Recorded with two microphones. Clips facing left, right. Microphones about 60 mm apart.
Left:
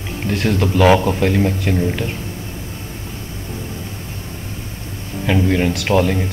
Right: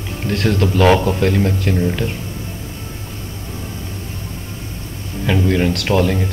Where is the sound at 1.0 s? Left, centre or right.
Left.